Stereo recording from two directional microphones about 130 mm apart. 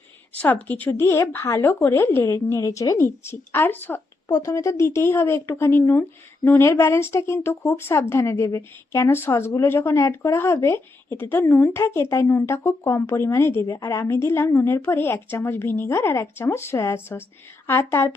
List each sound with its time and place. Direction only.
0.3 s speech: 15° left (ahead or behind)
4.3 s speech: 25° left (ahead or behind)